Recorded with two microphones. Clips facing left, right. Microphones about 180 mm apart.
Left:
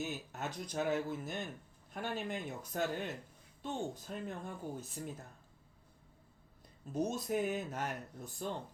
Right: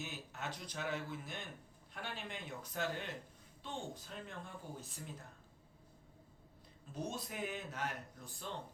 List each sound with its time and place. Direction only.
0.0 s speech: 45° left (ahead or behind)
6.9 s speech: 45° left (ahead or behind)